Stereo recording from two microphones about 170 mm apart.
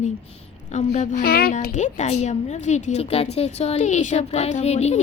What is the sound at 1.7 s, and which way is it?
A woman's voice, 45° left (ahead or behind).